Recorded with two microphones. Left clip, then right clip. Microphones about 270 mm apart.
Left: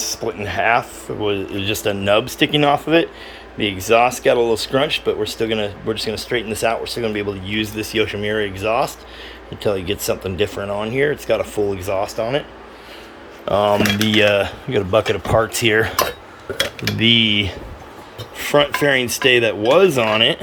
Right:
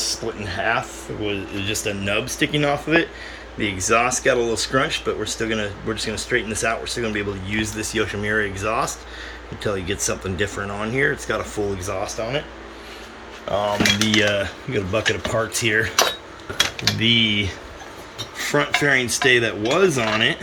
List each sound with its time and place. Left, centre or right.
0.0 s speech: centre
12.1 s speech: centre
13.5 s speech: left
14.1 s speech: centre
17.0 s speech: centre